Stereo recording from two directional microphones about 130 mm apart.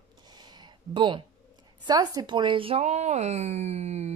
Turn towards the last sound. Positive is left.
turn(degrees=-55)  # may be behind; listen again after turning